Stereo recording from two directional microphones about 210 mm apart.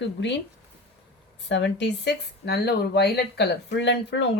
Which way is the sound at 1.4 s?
55° left (ahead or behind).